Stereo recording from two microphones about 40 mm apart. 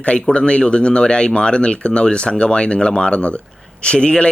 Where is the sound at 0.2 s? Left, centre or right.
Left.